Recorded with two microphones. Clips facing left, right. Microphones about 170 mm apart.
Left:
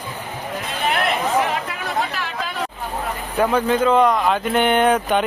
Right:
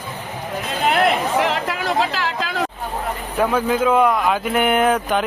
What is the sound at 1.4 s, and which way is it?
Chatter, 80° right.